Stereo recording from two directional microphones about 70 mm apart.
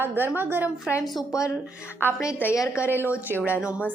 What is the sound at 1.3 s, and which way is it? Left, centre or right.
Speech, left.